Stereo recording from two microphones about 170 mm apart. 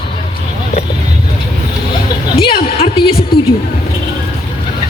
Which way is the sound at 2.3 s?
30° left (ahead or behind).